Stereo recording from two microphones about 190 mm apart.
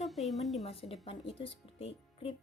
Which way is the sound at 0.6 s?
30° left (ahead or behind).